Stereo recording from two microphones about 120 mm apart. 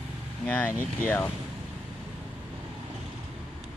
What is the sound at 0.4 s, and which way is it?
Speech, 10° left (ahead or behind).